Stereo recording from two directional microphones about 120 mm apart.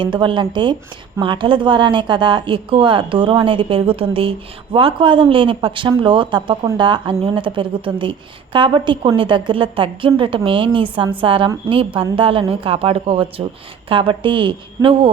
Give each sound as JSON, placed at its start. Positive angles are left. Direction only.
{"t": 0.0, "sound": "speech", "side_deg": -45}